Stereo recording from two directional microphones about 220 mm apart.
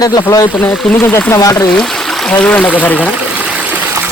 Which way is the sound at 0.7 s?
Centre (ahead or behind).